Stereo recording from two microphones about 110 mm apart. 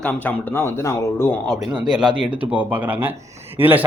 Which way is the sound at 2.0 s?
5° right (ahead or behind).